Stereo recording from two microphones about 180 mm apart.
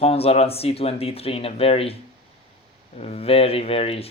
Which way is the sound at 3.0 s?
35° left (ahead or behind).